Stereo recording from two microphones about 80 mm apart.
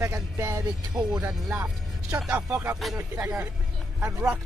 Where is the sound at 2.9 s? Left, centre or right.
Right.